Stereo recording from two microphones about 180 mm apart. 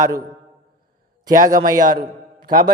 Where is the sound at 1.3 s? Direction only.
50° right (ahead or behind).